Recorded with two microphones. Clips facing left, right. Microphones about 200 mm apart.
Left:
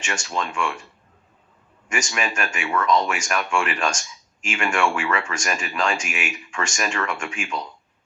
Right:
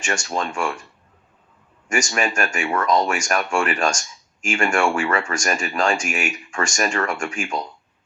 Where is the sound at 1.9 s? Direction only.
45° right (ahead or behind).